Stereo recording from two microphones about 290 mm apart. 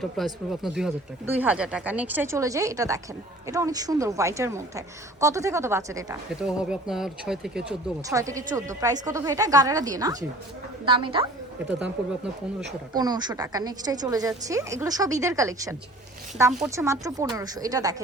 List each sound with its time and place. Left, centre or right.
0.2 s speech: centre
12.9 s speech: centre